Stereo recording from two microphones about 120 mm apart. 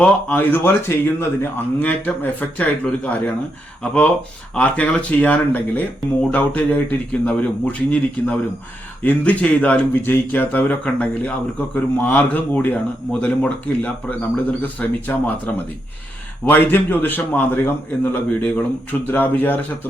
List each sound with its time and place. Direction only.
0.0 s speech: 10° left (ahead or behind)
4.5 s speech: 10° left (ahead or behind)